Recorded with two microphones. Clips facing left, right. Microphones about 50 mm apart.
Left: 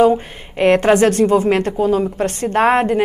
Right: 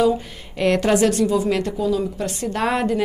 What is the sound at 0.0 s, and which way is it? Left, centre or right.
A woman's voice, left.